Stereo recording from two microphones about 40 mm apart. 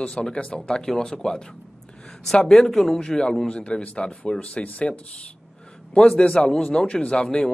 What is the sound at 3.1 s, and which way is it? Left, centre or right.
A man's voice, centre.